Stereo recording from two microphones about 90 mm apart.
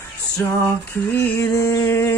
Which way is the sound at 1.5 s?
35° left (ahead or behind).